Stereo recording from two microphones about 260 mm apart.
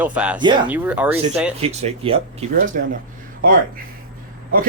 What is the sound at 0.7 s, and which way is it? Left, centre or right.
Speech, centre.